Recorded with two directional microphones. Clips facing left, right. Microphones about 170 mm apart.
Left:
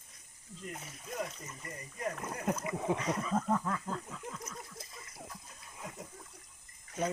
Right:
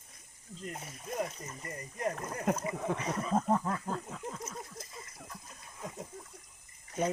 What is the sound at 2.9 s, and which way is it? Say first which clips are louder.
Speech: left 3 dB; 10° left (ahead or behind).